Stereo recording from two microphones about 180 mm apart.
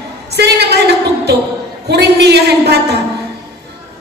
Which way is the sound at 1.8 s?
70° right (ahead or behind).